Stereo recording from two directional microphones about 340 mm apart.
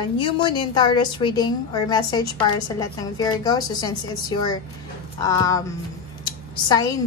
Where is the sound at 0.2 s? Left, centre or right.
Centre.